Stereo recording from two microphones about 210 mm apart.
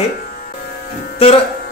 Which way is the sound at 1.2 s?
25° left (ahead or behind).